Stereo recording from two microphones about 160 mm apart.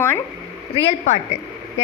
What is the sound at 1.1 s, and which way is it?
Speech, 45° left (ahead or behind).